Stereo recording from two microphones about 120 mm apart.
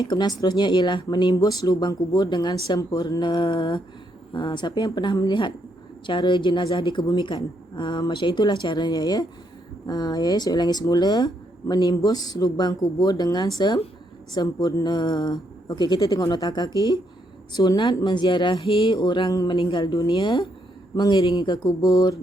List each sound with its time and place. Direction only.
0.0 s speech: 35° left (ahead or behind)